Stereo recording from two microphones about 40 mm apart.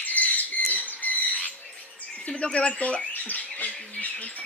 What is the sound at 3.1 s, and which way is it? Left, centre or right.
Bird, left.